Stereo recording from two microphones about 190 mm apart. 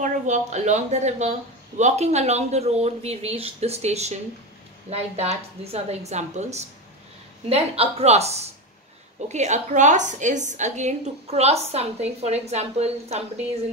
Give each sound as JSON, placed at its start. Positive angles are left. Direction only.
{"t": 0.0, "sound": "a woman's voice", "side_deg": -40}